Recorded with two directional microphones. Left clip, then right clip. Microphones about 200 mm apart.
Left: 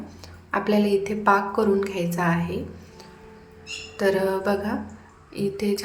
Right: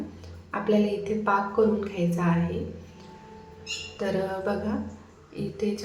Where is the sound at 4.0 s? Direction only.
20° left (ahead or behind).